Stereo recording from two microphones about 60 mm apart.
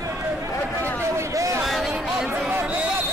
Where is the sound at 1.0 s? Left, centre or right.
Right.